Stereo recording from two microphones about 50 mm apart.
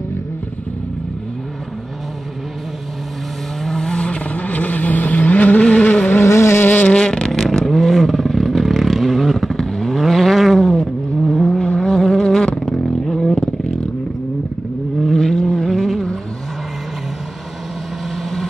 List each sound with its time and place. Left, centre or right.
3.6 s vehicle: centre; by 5.9 s left
6.2 s vehicle: left
6.9 s vehicle: centre
11.5 s vehicle: centre
15.0 s vehicle: centre